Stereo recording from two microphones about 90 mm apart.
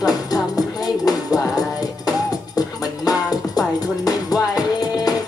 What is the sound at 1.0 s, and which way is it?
Music, 45° left (ahead or behind).